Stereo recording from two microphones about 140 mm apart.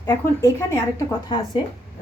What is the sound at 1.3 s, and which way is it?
Speech, 30° left (ahead or behind).